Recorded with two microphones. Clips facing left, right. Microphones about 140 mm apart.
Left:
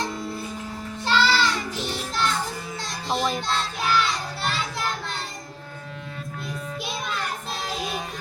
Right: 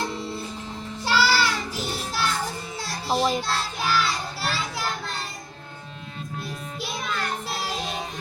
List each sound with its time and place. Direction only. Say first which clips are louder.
1.0 s music: even; 10° right (ahead or behind)
3.2 s child singing: right 3 dB; 25° right (ahead or behind)
3.4 s child singing: left 1 dB; 5° right (ahead or behind)